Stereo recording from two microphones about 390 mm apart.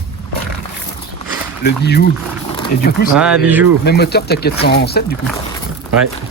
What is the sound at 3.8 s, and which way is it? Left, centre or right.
Speech, left.